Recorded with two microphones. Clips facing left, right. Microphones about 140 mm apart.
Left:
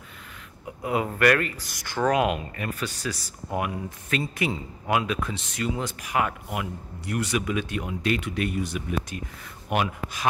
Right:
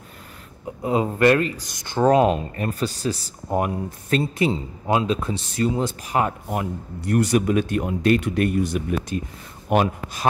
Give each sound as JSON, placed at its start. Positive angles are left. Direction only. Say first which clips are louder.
{"t": 0.8, "sound": "speech", "louder": "right 4 dB", "side_deg": -25}
{"t": 9.1, "sound": "speech", "louder": "right 8 dB", "side_deg": -35}